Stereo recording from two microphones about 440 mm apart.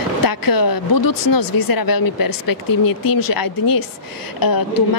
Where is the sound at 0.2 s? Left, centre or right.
Left.